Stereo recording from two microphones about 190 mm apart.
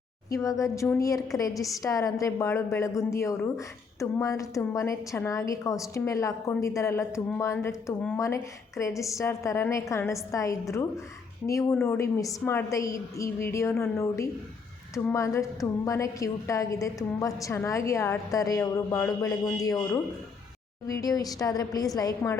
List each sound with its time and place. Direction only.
0.3 s a woman's voice: 15° left (ahead or behind)